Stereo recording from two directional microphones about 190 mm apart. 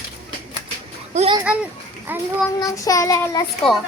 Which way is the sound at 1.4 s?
10° right (ahead or behind).